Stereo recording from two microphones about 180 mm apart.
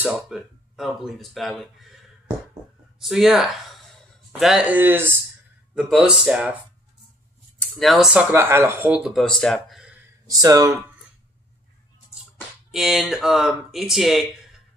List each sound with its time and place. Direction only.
0.0 s speech: 5° right (ahead or behind)
3.0 s speech: centre (ahead or behind)
7.8 s speech: centre (ahead or behind)
10.2 s speech: 20° right (ahead or behind)
12.7 s speech: centre (ahead or behind)